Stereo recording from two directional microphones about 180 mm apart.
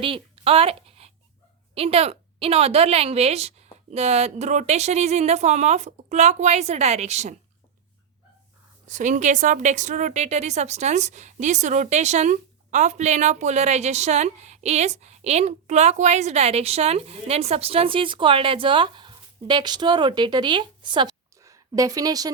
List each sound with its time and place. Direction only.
0.0 s a sound: 30° right (ahead or behind)
1.7 s a woman's voice: 35° right (ahead or behind)
8.9 s a woman's voice: 45° right (ahead or behind); by 22.3 s 20° right (ahead or behind)